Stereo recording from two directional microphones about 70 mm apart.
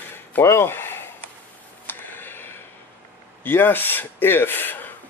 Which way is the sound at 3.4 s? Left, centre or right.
Left.